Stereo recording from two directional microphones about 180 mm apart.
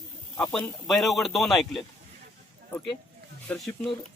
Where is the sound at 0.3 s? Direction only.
5° left (ahead or behind).